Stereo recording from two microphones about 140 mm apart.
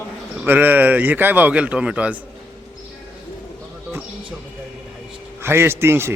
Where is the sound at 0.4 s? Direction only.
10° right (ahead or behind).